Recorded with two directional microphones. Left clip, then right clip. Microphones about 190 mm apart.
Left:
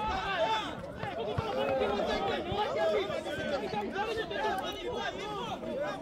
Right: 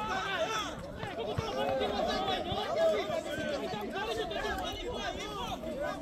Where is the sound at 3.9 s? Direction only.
45° left (ahead or behind).